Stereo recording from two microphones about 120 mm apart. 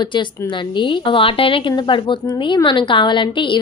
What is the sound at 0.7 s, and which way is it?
A woman's voice, 45° left (ahead or behind).